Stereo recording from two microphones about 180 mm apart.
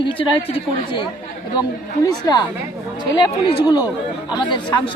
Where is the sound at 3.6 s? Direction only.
25° left (ahead or behind).